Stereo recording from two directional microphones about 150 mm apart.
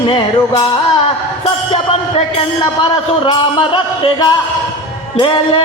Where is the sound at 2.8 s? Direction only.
30° left (ahead or behind).